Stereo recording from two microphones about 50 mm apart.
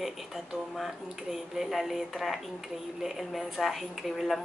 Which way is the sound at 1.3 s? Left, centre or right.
Centre.